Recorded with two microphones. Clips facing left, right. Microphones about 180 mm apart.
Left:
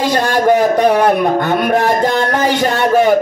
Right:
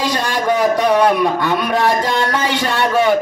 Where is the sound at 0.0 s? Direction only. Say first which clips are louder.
Left 5 dB; 55° left (ahead or behind).